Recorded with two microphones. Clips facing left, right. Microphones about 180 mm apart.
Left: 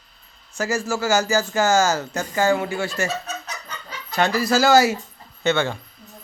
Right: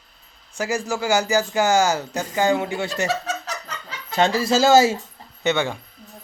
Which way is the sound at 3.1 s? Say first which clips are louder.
Right 4 dB; 90° right.